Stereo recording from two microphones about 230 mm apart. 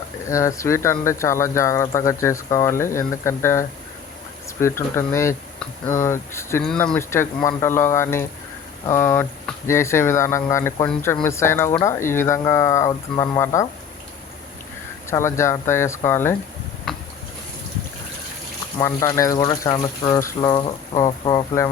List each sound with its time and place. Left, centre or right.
0.3 s speech: centre
15.1 s speech: centre
18.8 s speech: centre